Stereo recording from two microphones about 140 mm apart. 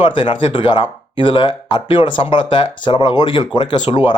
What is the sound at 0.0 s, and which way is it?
Speech, 40° left (ahead or behind).